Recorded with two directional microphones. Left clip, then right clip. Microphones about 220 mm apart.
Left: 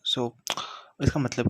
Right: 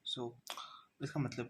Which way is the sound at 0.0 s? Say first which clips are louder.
Left 14 dB; 35° left (ahead or behind).